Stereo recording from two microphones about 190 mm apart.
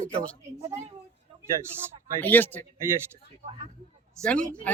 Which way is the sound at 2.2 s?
10° left (ahead or behind).